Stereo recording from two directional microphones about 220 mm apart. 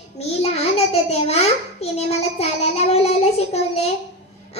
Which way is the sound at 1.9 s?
30° left (ahead or behind).